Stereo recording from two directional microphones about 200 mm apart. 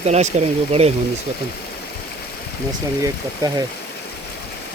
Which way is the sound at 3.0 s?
20° right (ahead or behind).